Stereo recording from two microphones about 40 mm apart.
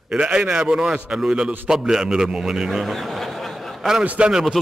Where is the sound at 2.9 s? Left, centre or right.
Centre.